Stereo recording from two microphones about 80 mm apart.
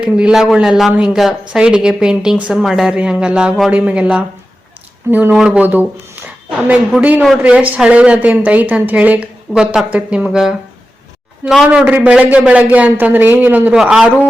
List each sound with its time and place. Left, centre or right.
0.0 s a woman's voice: centre
5.3 s a woman's voice: centre
7.0 s a man's voice: centre
13.8 s a woman's voice: centre